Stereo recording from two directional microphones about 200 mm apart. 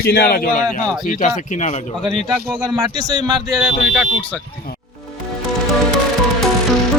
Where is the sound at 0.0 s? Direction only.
50° left (ahead or behind).